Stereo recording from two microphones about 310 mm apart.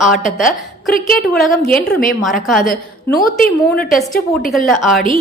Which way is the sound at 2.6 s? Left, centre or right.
Left.